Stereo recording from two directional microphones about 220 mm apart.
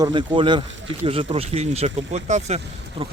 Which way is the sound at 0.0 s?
20° right (ahead or behind).